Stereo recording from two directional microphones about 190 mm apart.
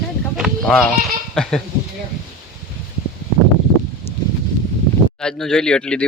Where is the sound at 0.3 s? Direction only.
Centre (ahead or behind).